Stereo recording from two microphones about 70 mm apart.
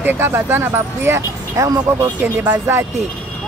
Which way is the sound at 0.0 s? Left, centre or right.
Right.